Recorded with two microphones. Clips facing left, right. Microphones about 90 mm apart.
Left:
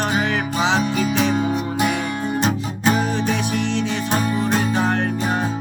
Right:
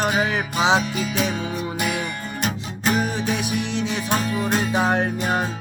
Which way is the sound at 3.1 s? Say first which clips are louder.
Left 3 dB; 15° right (ahead or behind).